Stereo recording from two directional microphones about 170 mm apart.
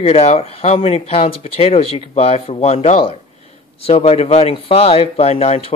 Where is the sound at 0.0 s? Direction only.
35° left (ahead or behind).